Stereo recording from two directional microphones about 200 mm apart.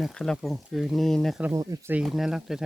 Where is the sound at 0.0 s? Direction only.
5° left (ahead or behind).